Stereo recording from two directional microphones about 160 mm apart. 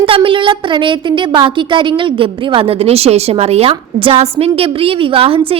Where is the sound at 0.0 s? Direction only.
35° right (ahead or behind).